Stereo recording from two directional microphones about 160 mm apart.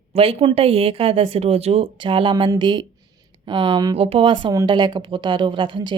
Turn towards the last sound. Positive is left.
turn(degrees=-30)  # may be behind; listen again after turning